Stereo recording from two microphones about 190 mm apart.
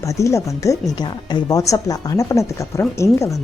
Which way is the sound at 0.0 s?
15° left (ahead or behind).